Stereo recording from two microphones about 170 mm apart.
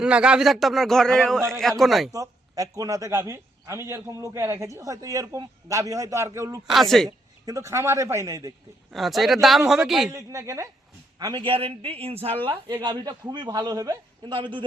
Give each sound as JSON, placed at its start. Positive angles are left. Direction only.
{"t": 0.0, "sound": "speech", "side_deg": -5}
{"t": 2.1, "sound": "a man's voice", "side_deg": -20}
{"t": 6.7, "sound": "speech", "side_deg": 0}
{"t": 7.4, "sound": "a man's voice", "side_deg": -20}
{"t": 8.9, "sound": "speech", "side_deg": 0}
{"t": 10.1, "sound": "a man's voice", "side_deg": -20}